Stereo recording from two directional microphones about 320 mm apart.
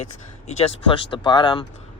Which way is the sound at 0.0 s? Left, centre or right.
Left.